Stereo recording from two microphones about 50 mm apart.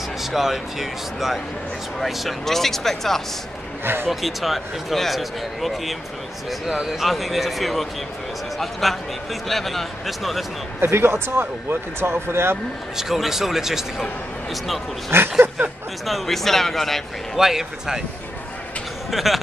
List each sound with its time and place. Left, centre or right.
0.2 s speech: centre
3.8 s speech: right
4.1 s speech: centre
11.0 s speech: right
12.9 s speech: centre
15.0 s speech: right
16.1 s speech: centre
17.4 s speech: centre
19.0 s speech: centre